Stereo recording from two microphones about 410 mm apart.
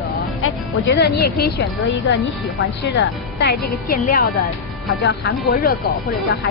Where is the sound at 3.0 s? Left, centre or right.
Left.